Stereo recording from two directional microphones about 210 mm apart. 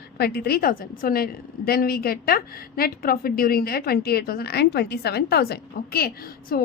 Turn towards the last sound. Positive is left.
turn(degrees=45)  # may be behind; listen again after turning